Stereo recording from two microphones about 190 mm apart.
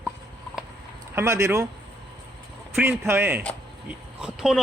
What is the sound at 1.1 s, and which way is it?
Speech, 15° right (ahead or behind).